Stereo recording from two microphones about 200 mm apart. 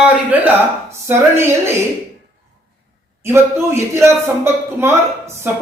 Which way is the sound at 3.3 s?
10° right (ahead or behind).